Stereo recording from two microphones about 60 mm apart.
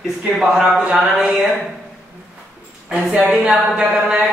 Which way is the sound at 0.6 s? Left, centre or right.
Centre.